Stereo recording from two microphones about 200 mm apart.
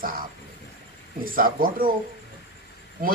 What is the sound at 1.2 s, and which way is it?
Speech, 45° right (ahead or behind).